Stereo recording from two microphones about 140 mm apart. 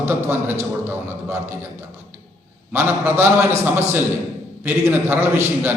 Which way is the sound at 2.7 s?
15° right (ahead or behind).